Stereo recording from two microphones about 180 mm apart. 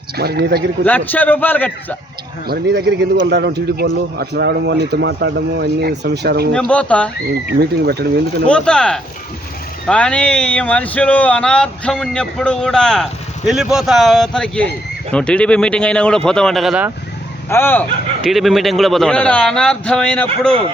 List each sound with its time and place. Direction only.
0.2 s speech: 60° right (ahead or behind)
0.9 s a man's voice: 10° left (ahead or behind)
2.5 s a man's voice: 65° right (ahead or behind)
6.5 s a man's voice: 5° left (ahead or behind)
7.4 s speech: 60° right (ahead or behind)
8.4 s speech: 5° left (ahead or behind)
17.5 s a man's voice: 10° left (ahead or behind)
18.2 s speech: centre (ahead or behind)